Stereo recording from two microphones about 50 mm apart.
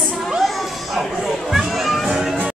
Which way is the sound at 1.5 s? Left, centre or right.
Centre.